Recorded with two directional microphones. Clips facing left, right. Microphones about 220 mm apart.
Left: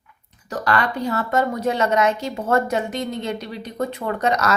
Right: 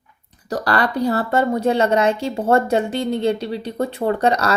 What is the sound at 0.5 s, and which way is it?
A woman's voice, 35° right (ahead or behind).